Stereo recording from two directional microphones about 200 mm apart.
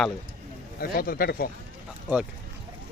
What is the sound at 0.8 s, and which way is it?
Speech, 50° left (ahead or behind).